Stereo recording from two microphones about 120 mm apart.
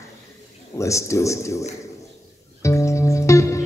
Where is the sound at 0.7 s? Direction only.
25° left (ahead or behind).